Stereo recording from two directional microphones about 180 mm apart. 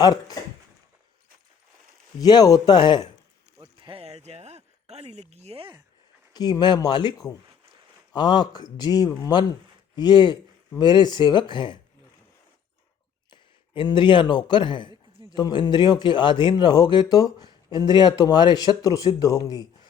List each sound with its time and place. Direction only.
0.0 s speech: 20° left (ahead or behind)
2.1 s speech: 20° left (ahead or behind)
3.6 s a sound: 30° right (ahead or behind)
6.3 s speech: 25° left (ahead or behind)
13.3 s speech: 25° left (ahead or behind)